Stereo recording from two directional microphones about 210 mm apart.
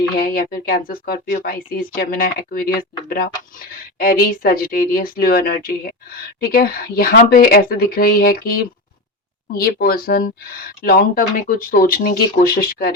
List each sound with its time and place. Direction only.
0.2 s speech: 45° left (ahead or behind)
9.5 s speech: 45° left (ahead or behind)